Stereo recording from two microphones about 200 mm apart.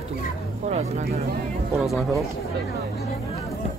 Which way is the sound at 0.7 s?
35° right (ahead or behind).